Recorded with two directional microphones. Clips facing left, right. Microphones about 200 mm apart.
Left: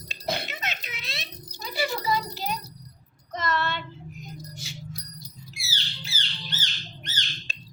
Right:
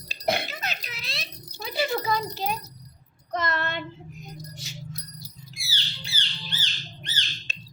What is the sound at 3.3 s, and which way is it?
Child singing, 50° right (ahead or behind).